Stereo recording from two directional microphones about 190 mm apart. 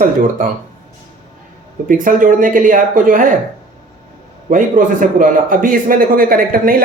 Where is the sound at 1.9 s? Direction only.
45° right (ahead or behind).